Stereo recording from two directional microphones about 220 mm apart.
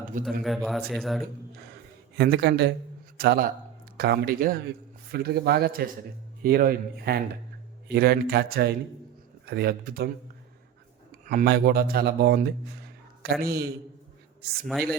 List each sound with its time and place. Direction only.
0.4 s a man's voice: centre (ahead or behind)
2.1 s speech: 45° right (ahead or behind)
11.3 s speech: 45° right (ahead or behind)
14.7 s a man's voice: centre (ahead or behind)